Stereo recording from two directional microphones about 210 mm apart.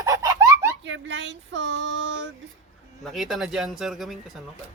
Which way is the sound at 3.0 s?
Centre (ahead or behind).